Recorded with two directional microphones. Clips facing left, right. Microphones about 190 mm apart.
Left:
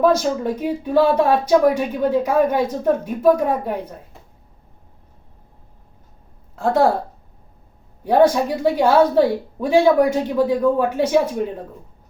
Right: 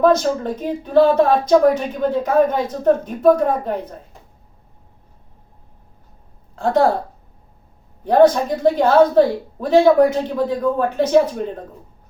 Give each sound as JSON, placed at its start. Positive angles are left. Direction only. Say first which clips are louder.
{"t": 0.0, "sound": "speech", "louder": "right 1 dB", "side_deg": 10}
{"t": 8.0, "sound": "speech", "louder": "right 2 dB", "side_deg": 10}